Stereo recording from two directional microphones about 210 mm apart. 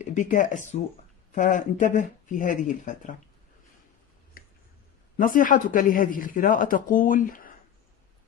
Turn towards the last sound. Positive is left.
turn(degrees=40)  # may be behind; listen again after turning